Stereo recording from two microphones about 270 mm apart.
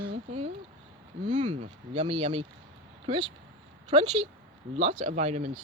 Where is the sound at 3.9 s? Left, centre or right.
Right.